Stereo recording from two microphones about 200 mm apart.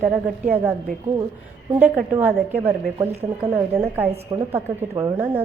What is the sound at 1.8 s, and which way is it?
Speech, 10° right (ahead or behind).